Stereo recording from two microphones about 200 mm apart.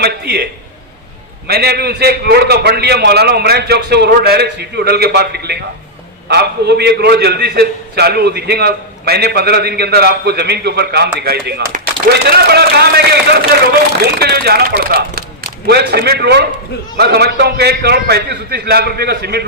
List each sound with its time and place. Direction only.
0.0 s a man's voice: 55° right (ahead or behind)
1.5 s a man's voice: 55° right (ahead or behind)